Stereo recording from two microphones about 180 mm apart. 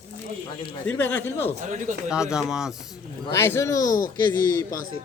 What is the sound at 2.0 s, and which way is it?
Speech, 5° right (ahead or behind).